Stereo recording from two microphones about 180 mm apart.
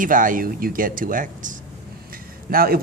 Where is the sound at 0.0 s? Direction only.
50° right (ahead or behind).